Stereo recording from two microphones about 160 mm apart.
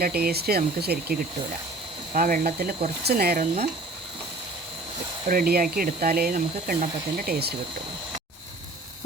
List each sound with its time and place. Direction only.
0.0 s speech: 70° right (ahead or behind)
2.1 s speech: 60° right (ahead or behind)
3.0 s speech: 75° right (ahead or behind)
3.4 s speech: 45° right (ahead or behind)
5.3 s speech: 70° right (ahead or behind)